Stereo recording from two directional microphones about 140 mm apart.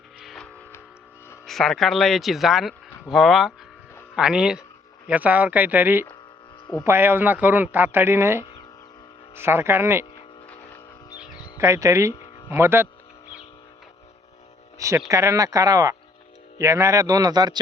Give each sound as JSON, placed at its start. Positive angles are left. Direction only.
{"t": 0.2, "sound": "music", "side_deg": 0}
{"t": 1.5, "sound": "speech", "side_deg": 0}
{"t": 11.5, "sound": "speech", "side_deg": -20}
{"t": 14.8, "sound": "speech", "side_deg": -20}